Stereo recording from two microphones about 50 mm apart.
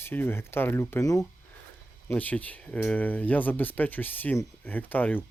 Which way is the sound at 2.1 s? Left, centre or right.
Left.